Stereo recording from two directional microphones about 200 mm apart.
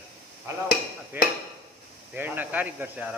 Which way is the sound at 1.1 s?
10° right (ahead or behind).